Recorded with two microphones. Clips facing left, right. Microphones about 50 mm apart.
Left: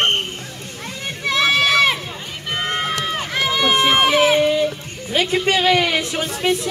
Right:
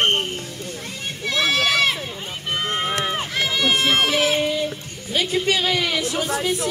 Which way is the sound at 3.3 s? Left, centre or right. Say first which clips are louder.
Left 4 dB; left.